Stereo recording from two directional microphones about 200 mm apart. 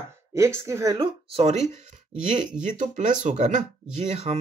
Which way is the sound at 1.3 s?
35° right (ahead or behind).